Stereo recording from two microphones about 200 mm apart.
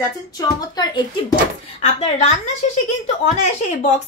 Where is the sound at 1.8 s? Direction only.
35° left (ahead or behind).